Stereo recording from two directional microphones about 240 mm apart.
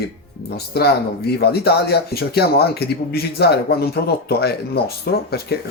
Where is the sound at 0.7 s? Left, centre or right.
Left.